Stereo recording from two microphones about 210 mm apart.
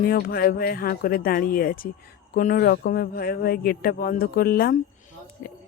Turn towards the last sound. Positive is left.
turn(degrees=45)  # may be behind; listen again after turning